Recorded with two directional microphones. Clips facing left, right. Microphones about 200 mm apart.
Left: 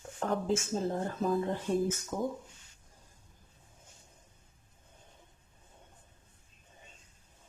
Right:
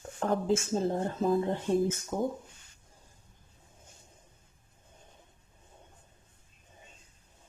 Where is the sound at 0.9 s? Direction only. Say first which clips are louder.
Right 2 dB; 30° right (ahead or behind).